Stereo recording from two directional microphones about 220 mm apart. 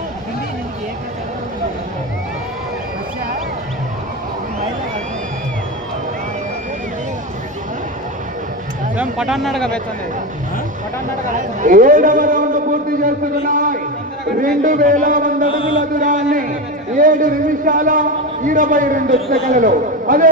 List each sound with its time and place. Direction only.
8.9 s speech: 5° right (ahead or behind)
11.2 s a man's voice: 35° right (ahead or behind)
15.5 s mantra: 25° left (ahead or behind)
15.8 s a man's voice: 35° right (ahead or behind)